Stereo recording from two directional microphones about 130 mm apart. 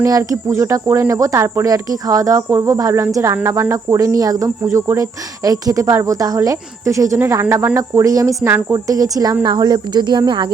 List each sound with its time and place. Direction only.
0.0 s speech: 25° right (ahead or behind)